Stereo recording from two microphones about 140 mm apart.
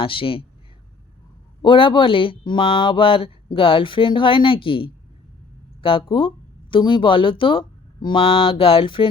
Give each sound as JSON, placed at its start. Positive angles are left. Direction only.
{"t": 0.0, "sound": "speech", "side_deg": 40}
{"t": 1.6, "sound": "speech", "side_deg": 35}